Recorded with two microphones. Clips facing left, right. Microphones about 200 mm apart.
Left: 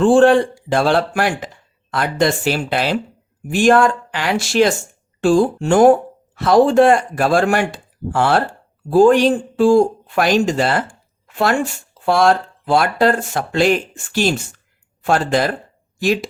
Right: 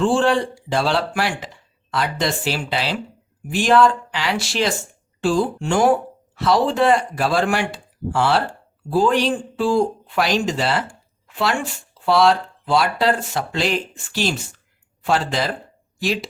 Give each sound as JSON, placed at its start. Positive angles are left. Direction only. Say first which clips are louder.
{"t": 0.0, "sound": "speech", "louder": "left 7 dB", "side_deg": 50}